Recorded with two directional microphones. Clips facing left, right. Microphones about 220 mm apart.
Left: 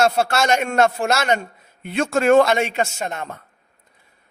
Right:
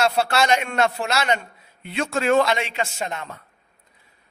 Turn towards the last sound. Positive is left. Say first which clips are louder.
# left 2 dB
turn(degrees=50)  # may be behind; listen again after turning